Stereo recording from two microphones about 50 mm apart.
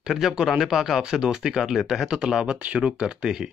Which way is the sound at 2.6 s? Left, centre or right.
Right.